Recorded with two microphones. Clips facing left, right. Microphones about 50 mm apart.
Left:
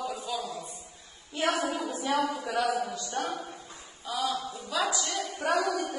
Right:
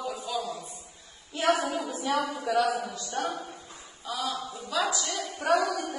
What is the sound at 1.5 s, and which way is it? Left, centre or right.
Speech, right.